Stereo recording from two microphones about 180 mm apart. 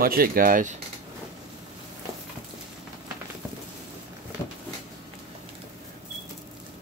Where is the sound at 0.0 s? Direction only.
55° right (ahead or behind).